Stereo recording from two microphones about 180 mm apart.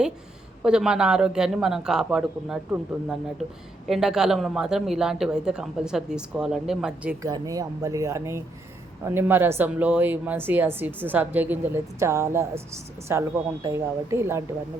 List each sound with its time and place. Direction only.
0.6 s speech: 5° right (ahead or behind)
7.2 s speech: 20° right (ahead or behind)